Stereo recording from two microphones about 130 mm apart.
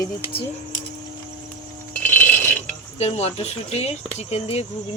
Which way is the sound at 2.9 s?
55° left (ahead or behind).